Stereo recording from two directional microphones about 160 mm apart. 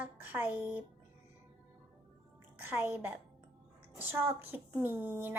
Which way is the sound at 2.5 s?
15° right (ahead or behind).